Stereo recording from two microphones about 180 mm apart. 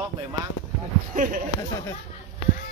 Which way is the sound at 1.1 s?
50° right (ahead or behind).